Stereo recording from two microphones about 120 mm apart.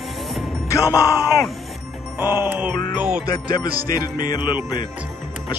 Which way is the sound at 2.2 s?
20° right (ahead or behind).